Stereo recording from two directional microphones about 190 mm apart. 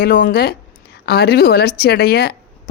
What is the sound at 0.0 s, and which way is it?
Speech, 50° left (ahead or behind).